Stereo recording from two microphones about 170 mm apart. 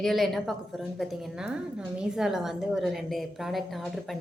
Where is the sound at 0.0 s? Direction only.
Centre (ahead or behind).